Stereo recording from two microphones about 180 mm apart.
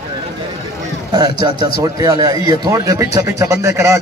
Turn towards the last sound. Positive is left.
turn(degrees=-15)  # may be behind; listen again after turning